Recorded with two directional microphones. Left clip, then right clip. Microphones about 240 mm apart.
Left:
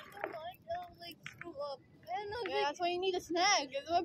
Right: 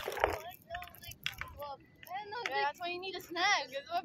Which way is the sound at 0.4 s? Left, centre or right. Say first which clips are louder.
Left 3 dB; left.